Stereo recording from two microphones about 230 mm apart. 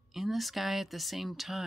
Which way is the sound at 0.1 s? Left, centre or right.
Centre.